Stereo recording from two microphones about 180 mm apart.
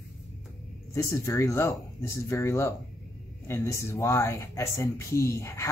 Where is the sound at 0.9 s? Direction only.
15° left (ahead or behind).